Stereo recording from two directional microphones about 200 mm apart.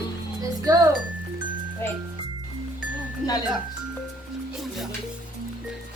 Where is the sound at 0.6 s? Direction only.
15° right (ahead or behind).